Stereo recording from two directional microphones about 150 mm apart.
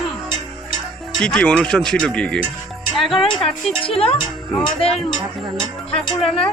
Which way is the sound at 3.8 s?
40° left (ahead or behind).